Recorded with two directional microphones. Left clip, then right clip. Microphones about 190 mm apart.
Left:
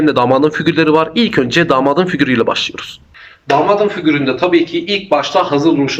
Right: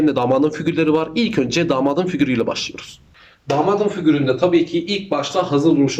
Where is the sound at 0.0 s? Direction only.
10° right (ahead or behind).